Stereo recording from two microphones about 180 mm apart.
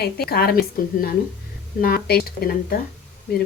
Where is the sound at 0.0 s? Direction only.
60° left (ahead or behind).